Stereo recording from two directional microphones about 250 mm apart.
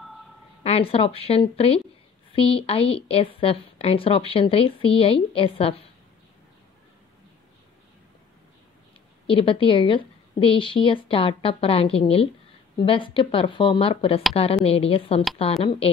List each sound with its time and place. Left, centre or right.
0.7 s a woman's voice: left
9.3 s a woman's voice: left